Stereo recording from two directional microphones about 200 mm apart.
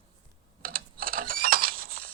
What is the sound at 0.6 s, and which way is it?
Mechanisms, 45° right (ahead or behind).